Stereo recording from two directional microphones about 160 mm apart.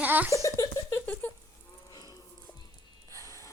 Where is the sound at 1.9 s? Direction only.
25° left (ahead or behind).